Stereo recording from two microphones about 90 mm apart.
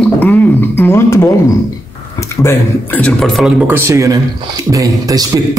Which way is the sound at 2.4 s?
25° left (ahead or behind).